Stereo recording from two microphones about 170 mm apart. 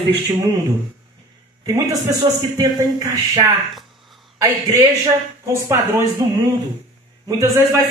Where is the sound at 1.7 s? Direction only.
20° right (ahead or behind).